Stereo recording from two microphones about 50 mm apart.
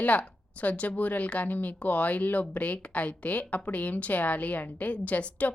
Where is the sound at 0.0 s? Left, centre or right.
Left.